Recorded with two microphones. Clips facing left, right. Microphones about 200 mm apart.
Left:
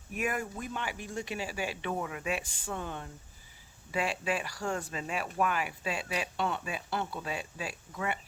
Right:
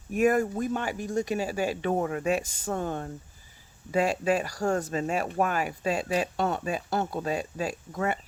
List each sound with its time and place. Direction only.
0.1 s speech: 40° right (ahead or behind)